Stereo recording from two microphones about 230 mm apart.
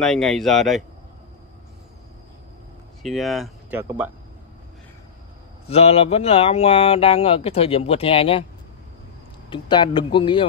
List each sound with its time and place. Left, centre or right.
0.0 s speech: centre
3.0 s speech: centre
5.7 s speech: left
9.5 s speech: centre